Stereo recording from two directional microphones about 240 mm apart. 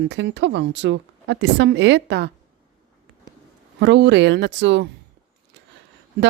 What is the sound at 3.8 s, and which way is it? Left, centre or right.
Speech, right.